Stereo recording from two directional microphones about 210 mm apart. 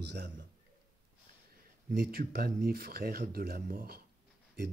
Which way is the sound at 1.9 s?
45° right (ahead or behind).